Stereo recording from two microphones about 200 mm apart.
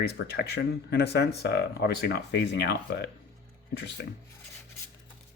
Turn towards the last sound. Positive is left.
turn(degrees=65)  # may be behind; listen again after turning